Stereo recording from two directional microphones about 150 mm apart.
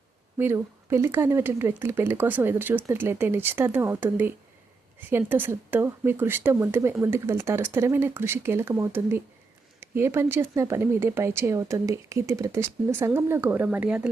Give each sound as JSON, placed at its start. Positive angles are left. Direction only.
{"t": 0.3, "sound": "speech", "side_deg": -15}